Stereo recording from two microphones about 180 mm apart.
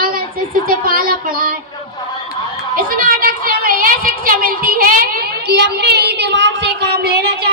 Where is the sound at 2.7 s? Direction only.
55° right (ahead or behind).